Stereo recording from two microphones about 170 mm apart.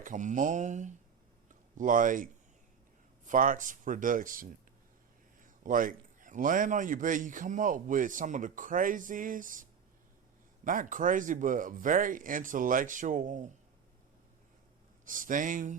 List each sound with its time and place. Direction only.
0.0 s a man's voice: 50° right (ahead or behind)
15.0 s a man's voice: 50° right (ahead or behind)